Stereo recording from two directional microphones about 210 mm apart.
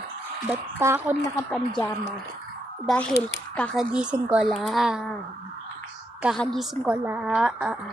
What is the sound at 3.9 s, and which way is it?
A woman's voice, 5° right (ahead or behind).